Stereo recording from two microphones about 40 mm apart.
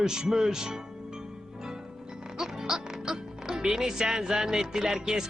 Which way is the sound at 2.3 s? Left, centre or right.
Centre.